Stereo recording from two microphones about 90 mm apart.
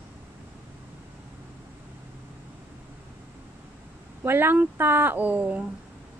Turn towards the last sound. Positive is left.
turn(degrees=-15)  # may be behind; listen again after turning